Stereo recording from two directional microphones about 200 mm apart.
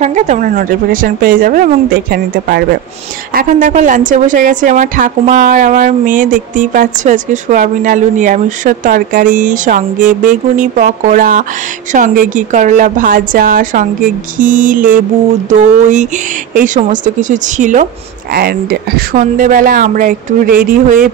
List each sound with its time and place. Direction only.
0.0 s a woman's voice: 35° right (ahead or behind)
18.3 s a woman's voice: 50° right (ahead or behind)